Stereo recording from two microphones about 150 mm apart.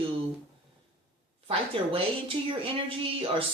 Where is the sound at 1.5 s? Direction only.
40° right (ahead or behind).